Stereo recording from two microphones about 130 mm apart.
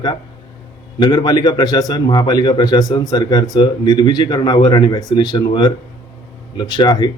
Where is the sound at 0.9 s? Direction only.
35° left (ahead or behind).